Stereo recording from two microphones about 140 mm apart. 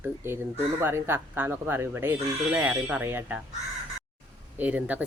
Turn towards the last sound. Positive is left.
turn(degrees=-10)  # may be behind; listen again after turning